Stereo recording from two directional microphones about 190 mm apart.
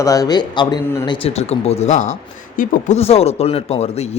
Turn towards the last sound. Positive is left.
turn(degrees=35)  # may be behind; listen again after turning